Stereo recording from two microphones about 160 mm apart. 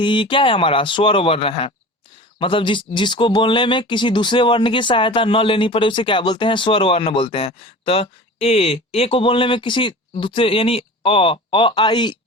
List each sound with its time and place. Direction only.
0.0 s speech: 30° left (ahead or behind)